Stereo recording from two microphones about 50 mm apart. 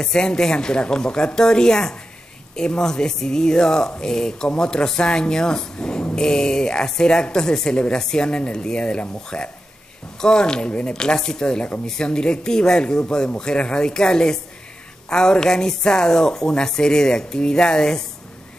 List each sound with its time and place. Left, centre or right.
0.0 s speech: centre